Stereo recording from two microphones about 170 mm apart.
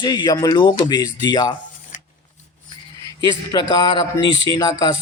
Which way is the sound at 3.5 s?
25° left (ahead or behind).